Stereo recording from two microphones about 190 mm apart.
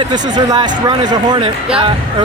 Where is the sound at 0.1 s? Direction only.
20° right (ahead or behind).